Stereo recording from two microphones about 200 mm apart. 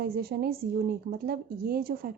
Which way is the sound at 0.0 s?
50° right (ahead or behind).